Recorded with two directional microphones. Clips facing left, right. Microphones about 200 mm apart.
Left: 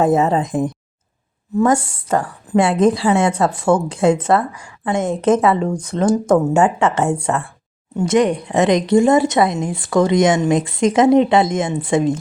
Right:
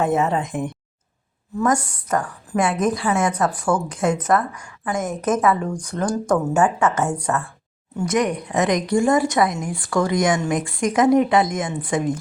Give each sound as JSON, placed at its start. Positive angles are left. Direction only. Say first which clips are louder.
{"t": 0.0, "sound": "a woman's voice", "louder": "left 5 dB", "side_deg": 35}